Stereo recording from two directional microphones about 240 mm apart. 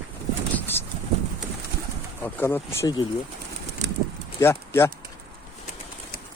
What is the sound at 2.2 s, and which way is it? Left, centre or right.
Speech, centre.